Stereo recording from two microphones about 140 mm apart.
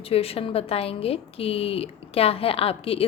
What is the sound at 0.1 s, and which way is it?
A woman's voice, 45° left (ahead or behind).